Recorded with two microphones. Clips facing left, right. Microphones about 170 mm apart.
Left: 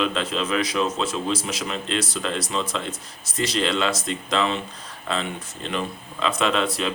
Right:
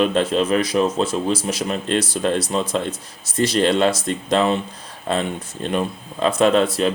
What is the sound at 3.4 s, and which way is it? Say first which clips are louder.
Speech: right 6 dB; 50° right (ahead or behind).